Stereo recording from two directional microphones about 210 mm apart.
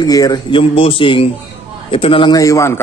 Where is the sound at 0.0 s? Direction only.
20° left (ahead or behind).